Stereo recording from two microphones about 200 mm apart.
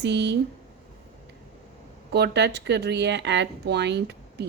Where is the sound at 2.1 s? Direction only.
55° right (ahead or behind).